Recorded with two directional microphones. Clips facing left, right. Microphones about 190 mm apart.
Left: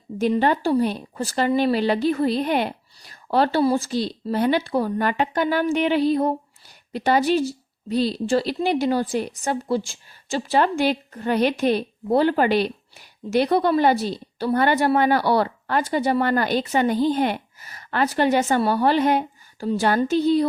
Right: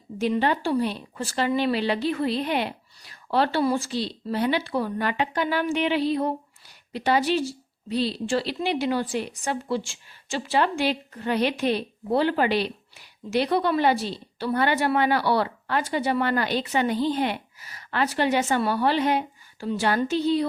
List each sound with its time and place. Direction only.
0.2 s a woman's voice: 45° left (ahead or behind)